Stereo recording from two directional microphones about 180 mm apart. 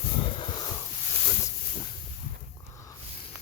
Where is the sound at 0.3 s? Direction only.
30° left (ahead or behind).